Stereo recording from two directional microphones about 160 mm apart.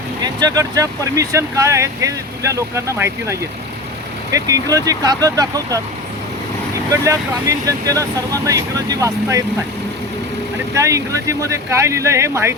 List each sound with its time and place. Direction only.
0.2 s speech: 25° right (ahead or behind)
6.9 s speech: 20° right (ahead or behind)
10.8 s speech: 20° right (ahead or behind)